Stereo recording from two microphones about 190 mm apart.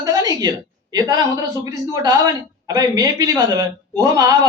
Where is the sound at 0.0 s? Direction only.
20° right (ahead or behind).